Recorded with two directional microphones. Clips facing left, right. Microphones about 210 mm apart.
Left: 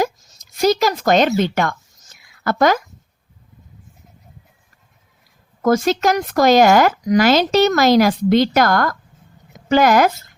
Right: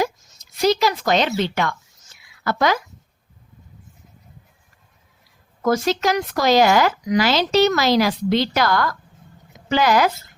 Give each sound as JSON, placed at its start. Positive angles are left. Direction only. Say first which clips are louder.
{"t": 0.5, "sound": "speech", "louder": "left 2 dB", "side_deg": 45}
{"t": 5.6, "sound": "speech", "louder": "left 3 dB", "side_deg": 50}